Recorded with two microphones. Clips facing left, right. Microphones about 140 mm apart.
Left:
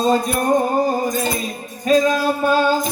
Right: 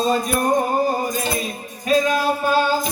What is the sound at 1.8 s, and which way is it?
Music, 35° left (ahead or behind).